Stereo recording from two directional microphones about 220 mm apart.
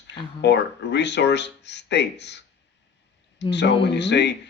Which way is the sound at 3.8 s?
50° left (ahead or behind).